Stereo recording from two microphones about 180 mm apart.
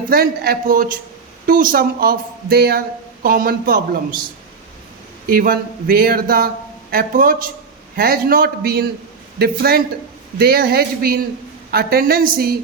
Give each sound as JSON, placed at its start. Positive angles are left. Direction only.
{"t": 0.1, "sound": "a man's voice", "side_deg": -55}
{"t": 5.2, "sound": "a man's voice", "side_deg": -55}